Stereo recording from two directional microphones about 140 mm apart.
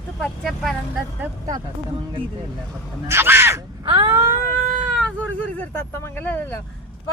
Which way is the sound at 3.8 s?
35° right (ahead or behind).